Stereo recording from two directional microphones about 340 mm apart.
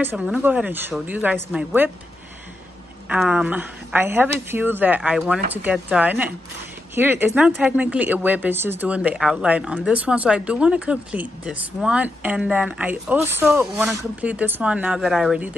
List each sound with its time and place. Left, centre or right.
0.0 s speech: centre
3.1 s speech: centre